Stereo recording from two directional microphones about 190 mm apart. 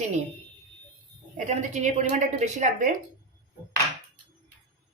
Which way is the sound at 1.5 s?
40° right (ahead or behind).